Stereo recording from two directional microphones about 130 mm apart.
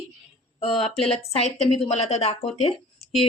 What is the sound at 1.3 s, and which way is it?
Speech, 50° left (ahead or behind).